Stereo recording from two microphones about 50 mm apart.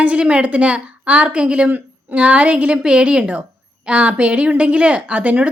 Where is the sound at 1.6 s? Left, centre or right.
Right.